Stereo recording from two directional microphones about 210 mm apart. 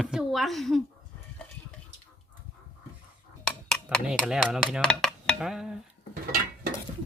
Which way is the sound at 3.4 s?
5° left (ahead or behind).